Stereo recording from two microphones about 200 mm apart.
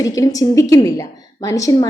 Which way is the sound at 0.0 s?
20° left (ahead or behind).